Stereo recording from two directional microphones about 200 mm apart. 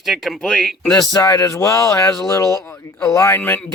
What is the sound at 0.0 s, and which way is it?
Speech, centre (ahead or behind).